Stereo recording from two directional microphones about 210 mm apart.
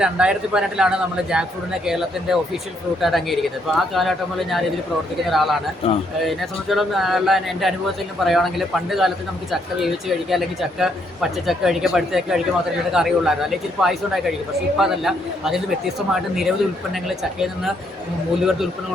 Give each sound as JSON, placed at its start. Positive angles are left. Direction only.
{"t": 0.0, "sound": "speech", "side_deg": -5}
{"t": 5.8, "sound": "speech", "side_deg": 25}
{"t": 6.2, "sound": "speech", "side_deg": 0}